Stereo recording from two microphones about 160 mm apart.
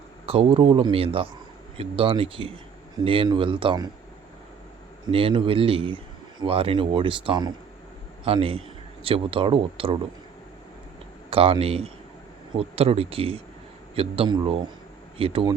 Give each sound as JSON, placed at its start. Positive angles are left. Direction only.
{"t": 0.3, "sound": "speech", "side_deg": -35}
{"t": 5.1, "sound": "speech", "side_deg": -35}
{"t": 11.3, "sound": "speech", "side_deg": -35}